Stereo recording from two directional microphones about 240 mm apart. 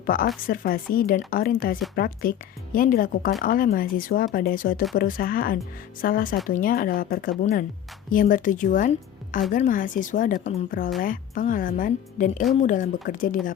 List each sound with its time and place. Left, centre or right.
0.0 s a woman's voice: left